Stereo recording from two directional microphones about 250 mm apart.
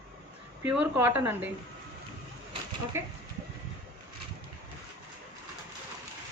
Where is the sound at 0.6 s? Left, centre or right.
Centre.